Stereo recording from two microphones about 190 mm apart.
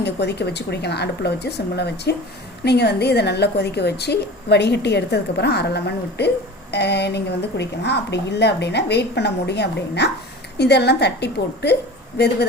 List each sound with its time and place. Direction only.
0.0 s a woman's voice: 60° left (ahead or behind)